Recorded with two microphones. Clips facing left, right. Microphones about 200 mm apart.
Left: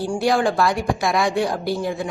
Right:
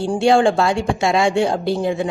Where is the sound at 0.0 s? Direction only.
25° right (ahead or behind).